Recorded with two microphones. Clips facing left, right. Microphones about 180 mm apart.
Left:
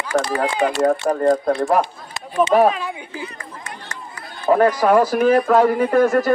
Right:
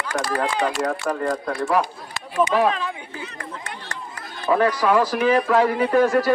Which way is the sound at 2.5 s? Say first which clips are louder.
Left 7 dB; 40° left (ahead or behind).